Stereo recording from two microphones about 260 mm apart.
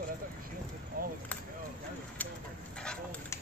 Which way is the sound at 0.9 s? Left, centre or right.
Right.